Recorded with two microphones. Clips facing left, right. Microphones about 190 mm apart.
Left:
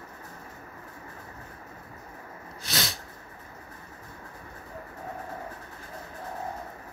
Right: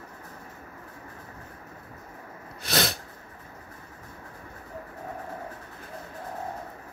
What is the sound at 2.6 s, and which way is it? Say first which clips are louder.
Sneeze: right 6 dB; 60° right (ahead or behind).